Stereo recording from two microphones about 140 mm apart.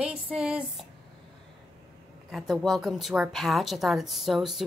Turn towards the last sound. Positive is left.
turn(degrees=0)  # may be behind; listen again after turning